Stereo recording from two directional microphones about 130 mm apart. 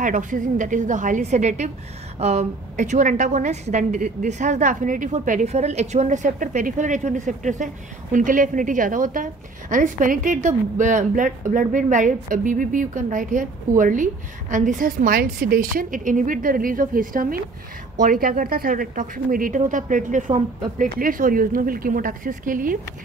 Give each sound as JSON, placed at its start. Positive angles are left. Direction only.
{"t": 0.0, "sound": "a woman's voice", "side_deg": -80}